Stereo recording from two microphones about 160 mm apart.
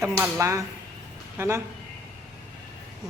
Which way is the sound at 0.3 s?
20° right (ahead or behind).